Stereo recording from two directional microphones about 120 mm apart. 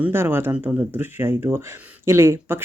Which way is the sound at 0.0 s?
20° right (ahead or behind).